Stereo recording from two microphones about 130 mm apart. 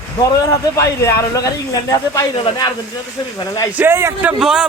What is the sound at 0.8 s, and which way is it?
Speech, 20° left (ahead or behind).